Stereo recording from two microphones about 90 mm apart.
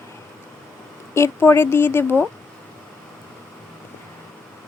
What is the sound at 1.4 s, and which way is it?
Speech, 25° left (ahead or behind).